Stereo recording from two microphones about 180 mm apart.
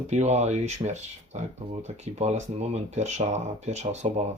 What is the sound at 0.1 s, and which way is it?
Speech, 40° right (ahead or behind).